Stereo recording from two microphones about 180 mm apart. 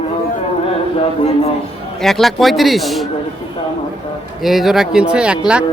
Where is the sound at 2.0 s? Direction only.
Centre (ahead or behind).